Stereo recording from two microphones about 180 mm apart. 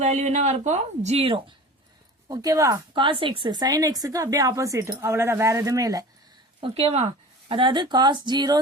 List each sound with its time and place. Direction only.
0.0 s speech: 40° right (ahead or behind)
2.3 s speech: 20° right (ahead or behind)
6.6 s speech: 35° right (ahead or behind)